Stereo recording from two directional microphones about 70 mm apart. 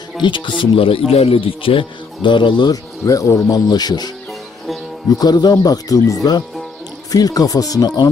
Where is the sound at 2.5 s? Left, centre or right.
Left.